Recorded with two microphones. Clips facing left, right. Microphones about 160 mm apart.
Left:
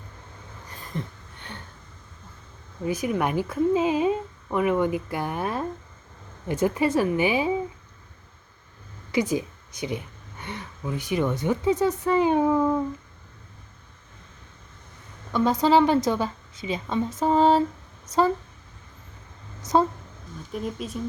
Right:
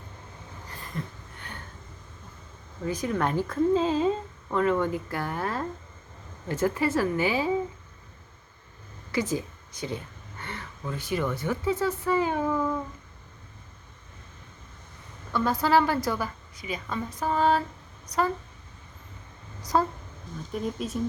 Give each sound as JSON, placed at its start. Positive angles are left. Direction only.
{"t": 0.9, "sound": "a sound", "side_deg": 25}
{"t": 2.8, "sound": "speech", "side_deg": 10}
{"t": 9.1, "sound": "speech", "side_deg": 15}
{"t": 15.3, "sound": "a woman's voice", "side_deg": 20}
{"t": 19.7, "sound": "a woman's voice", "side_deg": 25}
{"t": 20.5, "sound": "speech", "side_deg": 0}